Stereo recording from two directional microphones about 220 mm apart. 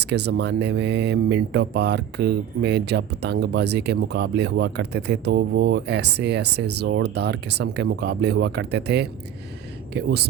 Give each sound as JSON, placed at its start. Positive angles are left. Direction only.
{"t": 0.0, "sound": "speech", "side_deg": -50}